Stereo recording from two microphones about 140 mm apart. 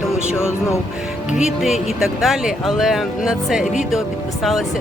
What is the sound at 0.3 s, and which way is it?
Speech, 20° left (ahead or behind).